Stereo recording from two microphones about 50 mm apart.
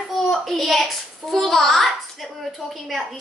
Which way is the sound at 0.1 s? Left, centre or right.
Centre.